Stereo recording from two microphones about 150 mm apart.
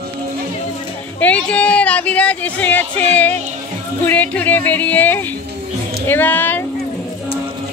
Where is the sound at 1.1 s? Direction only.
10° left (ahead or behind).